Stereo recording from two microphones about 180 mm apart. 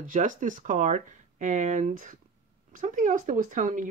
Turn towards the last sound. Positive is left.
turn(degrees=-45)  # may be behind; listen again after turning